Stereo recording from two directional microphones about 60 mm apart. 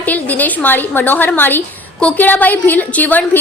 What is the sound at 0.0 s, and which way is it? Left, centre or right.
A woman's voice, left.